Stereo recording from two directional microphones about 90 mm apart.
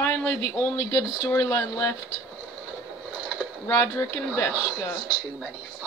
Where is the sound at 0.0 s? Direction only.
30° left (ahead or behind).